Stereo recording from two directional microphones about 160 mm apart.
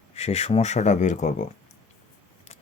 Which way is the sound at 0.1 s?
40° left (ahead or behind).